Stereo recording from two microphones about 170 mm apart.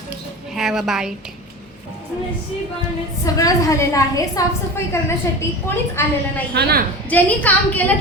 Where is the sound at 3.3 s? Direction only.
20° left (ahead or behind).